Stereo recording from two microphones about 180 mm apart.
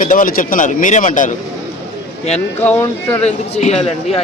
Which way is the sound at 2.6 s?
10° left (ahead or behind).